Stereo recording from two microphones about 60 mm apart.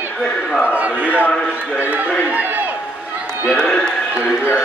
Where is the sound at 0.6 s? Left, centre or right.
Right.